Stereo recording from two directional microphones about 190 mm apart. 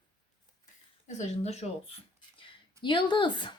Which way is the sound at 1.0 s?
35° left (ahead or behind).